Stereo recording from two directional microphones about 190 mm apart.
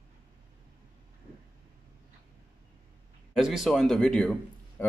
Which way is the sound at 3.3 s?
Centre (ahead or behind).